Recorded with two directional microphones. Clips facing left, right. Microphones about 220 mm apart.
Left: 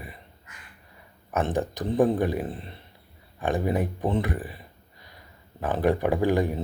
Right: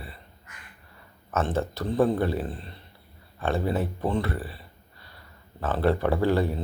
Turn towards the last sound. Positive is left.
turn(degrees=15)  # may be behind; listen again after turning